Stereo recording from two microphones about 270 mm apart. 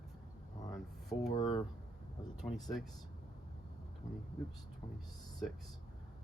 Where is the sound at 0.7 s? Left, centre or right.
Centre.